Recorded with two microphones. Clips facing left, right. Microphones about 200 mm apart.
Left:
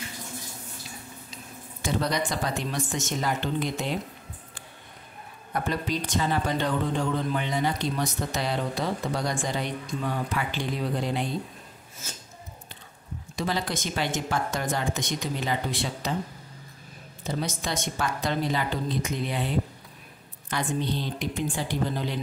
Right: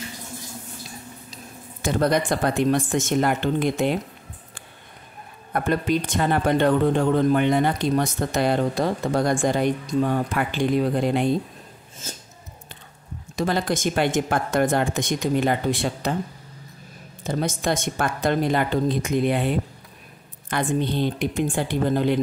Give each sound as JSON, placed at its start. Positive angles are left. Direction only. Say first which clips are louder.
{"t": 1.3, "sound": "speech", "louder": "right 2 dB", "side_deg": -50}
{"t": 5.5, "sound": "speech", "louder": "right 7 dB", "side_deg": -55}
{"t": 13.4, "sound": "speech", "louder": "right 6 dB", "side_deg": -50}
{"t": 17.3, "sound": "speech", "louder": "right 6 dB", "side_deg": -50}